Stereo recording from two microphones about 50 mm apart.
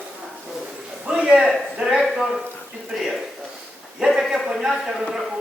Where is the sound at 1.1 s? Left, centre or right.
Centre.